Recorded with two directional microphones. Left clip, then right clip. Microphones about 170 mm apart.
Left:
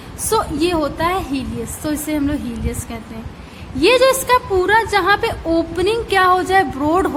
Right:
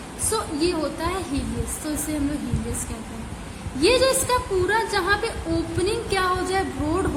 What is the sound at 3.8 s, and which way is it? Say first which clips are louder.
A woman's voice: left 6 dB; 40° left (ahead or behind).